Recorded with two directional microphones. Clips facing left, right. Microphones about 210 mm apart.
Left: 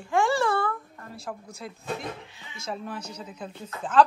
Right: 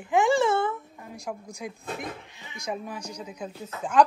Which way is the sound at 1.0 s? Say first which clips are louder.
Right 1 dB; 10° right (ahead or behind).